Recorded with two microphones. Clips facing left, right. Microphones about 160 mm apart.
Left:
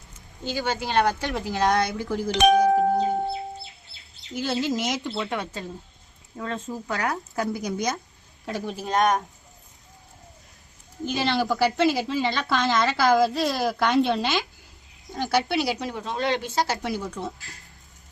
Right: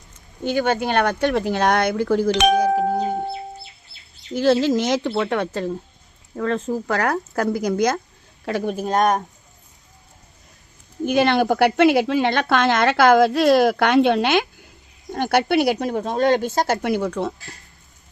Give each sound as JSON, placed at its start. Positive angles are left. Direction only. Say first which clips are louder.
{"t": 0.4, "sound": "speech", "louder": "right 8 dB", "side_deg": -60}
{"t": 4.4, "sound": "speech", "louder": "right 9 dB", "side_deg": -90}
{"t": 4.8, "sound": "speech", "louder": "right 7 dB", "side_deg": -70}
{"t": 8.4, "sound": "speech", "louder": "right 7 dB", "side_deg": -70}
{"t": 8.7, "sound": "a woman's voice", "louder": "right 3 dB", "side_deg": -45}
{"t": 11.1, "sound": "a woman's voice", "louder": "right 7 dB", "side_deg": -55}